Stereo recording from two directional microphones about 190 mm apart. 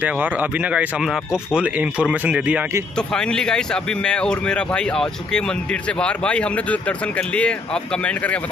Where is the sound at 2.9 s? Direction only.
5° left (ahead or behind).